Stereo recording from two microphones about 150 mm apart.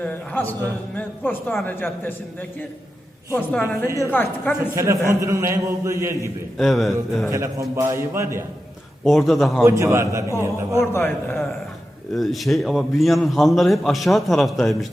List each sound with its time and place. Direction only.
0.0 s a man's voice: 15° left (ahead or behind)
3.3 s a man's voice: 15° left (ahead or behind)
3.8 s a man's voice: 20° right (ahead or behind)
4.1 s a man's voice: 15° left (ahead or behind)
4.7 s a man's voice: 20° right (ahead or behind)
6.6 s a man's voice: centre (ahead or behind)
7.3 s a man's voice: 20° right (ahead or behind)
9.0 s a man's voice: centre (ahead or behind)
9.6 s a man's voice: 20° right (ahead or behind)
10.8 s a man's voice: 15° left (ahead or behind)
12.1 s a man's voice: centre (ahead or behind)